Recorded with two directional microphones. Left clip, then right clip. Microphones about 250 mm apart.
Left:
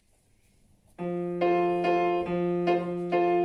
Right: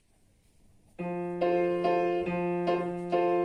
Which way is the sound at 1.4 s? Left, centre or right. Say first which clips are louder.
Left 2 dB; left.